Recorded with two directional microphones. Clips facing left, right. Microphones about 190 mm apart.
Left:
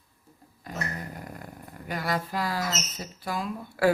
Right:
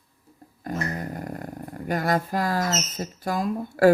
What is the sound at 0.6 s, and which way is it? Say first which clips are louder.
Speech: right 6 dB; 45° right (ahead or behind).